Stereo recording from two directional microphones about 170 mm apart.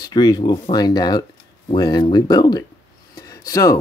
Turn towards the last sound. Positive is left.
turn(degrees=20)  # may be behind; listen again after turning